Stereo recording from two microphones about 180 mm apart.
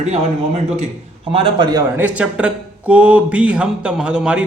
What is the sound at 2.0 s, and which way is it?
Speech, 5° right (ahead or behind).